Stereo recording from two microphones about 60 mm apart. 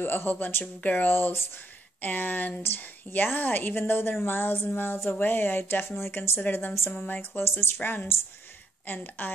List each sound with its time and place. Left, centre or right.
0.0 s a woman's voice: left
6.9 s a woman's voice: left
7.2 s a woman's voice: left